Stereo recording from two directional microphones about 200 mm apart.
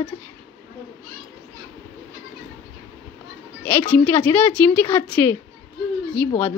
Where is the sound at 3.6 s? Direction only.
10° left (ahead or behind).